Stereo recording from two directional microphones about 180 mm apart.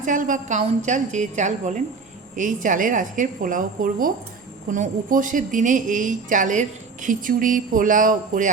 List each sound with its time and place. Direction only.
0.0 s a woman's voice: 45° right (ahead or behind)